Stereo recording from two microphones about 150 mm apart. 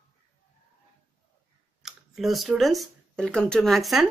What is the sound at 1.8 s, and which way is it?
A woman's voice, centre (ahead or behind).